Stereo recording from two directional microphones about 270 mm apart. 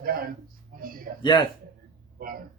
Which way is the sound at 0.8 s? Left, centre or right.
Right.